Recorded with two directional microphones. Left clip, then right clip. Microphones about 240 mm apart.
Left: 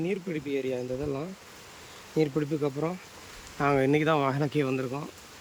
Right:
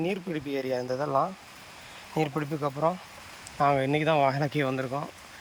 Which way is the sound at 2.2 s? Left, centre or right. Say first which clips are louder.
Left 2 dB; centre.